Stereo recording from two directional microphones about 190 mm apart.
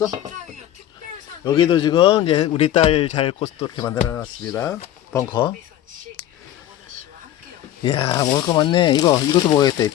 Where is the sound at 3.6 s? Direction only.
15° left (ahead or behind).